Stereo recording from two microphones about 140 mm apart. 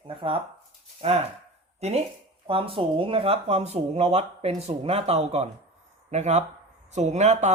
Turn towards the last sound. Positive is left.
turn(degrees=-55)  # may be behind; listen again after turning